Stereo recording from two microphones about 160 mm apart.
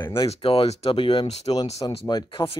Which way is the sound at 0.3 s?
35° left (ahead or behind).